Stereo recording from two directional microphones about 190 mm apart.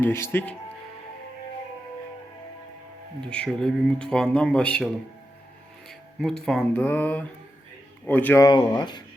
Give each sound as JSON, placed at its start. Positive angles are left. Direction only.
{"t": 0.0, "sound": "speech", "side_deg": 15}
{"t": 3.2, "sound": "speech", "side_deg": 5}
{"t": 5.9, "sound": "speech", "side_deg": 0}
{"t": 8.4, "sound": "speech", "side_deg": 20}